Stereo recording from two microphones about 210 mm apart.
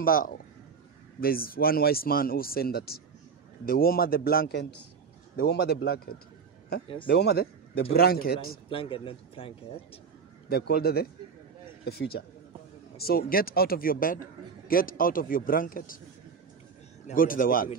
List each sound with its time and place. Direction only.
0.0 s speech: 45° left (ahead or behind)
8.6 s speech: 25° left (ahead or behind)
10.5 s a man's voice: 45° left (ahead or behind)
17.1 s a man's voice: 40° left (ahead or behind)